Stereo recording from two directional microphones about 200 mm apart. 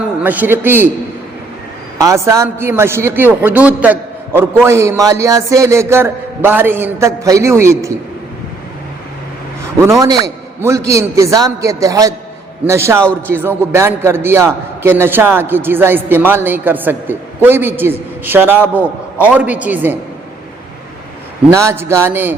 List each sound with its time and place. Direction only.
0.2 s a man's voice: 10° right (ahead or behind)
2.0 s a man's voice: 15° right (ahead or behind)
9.8 s a man's voice: 15° right (ahead or behind)
21.5 s a man's voice: 15° right (ahead or behind)